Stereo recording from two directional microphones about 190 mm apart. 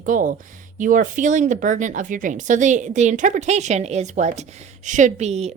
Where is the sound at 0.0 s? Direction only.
45° right (ahead or behind).